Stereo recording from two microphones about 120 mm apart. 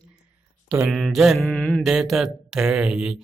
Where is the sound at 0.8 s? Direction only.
Centre (ahead or behind).